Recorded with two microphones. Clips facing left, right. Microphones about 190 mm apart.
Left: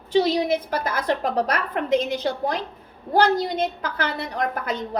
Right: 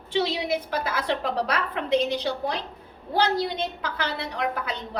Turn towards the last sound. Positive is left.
turn(degrees=45)  # may be behind; listen again after turning